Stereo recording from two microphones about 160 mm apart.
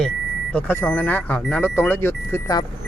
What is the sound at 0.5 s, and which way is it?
Speech, 10° left (ahead or behind).